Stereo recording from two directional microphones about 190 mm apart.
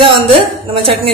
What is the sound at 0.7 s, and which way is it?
Speech, 30° right (ahead or behind).